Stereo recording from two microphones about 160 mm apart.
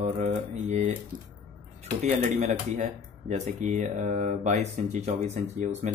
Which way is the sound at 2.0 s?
45° right (ahead or behind).